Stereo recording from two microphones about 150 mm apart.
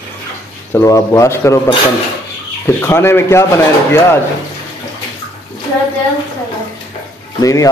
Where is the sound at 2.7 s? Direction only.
15° left (ahead or behind).